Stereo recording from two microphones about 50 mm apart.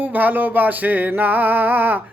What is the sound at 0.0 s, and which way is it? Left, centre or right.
Music, right.